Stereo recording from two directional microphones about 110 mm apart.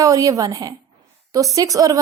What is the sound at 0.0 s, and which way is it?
A woman's voice, 30° right (ahead or behind).